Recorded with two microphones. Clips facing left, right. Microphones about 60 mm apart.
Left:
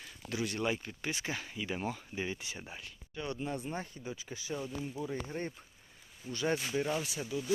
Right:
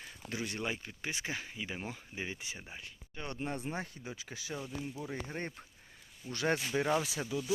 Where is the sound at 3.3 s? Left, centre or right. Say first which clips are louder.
Left 1 dB; right.